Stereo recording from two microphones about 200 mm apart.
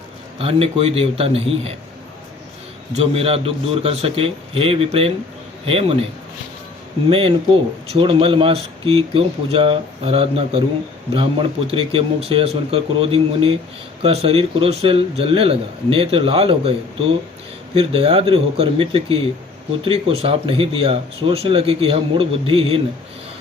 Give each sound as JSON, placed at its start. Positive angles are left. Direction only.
{"t": 0.3, "sound": "speech", "side_deg": -30}
{"t": 2.9, "sound": "speech", "side_deg": -30}
{"t": 7.1, "sound": "speech", "side_deg": -25}
{"t": 17.7, "sound": "speech", "side_deg": -30}